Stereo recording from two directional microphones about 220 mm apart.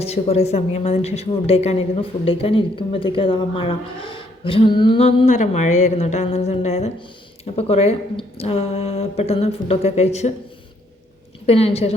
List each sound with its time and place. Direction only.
0.0 s a woman's voice: 30° left (ahead or behind)
11.4 s a woman's voice: 30° left (ahead or behind)